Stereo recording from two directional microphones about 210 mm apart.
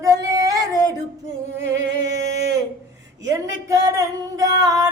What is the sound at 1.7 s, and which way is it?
Music, 15° right (ahead or behind).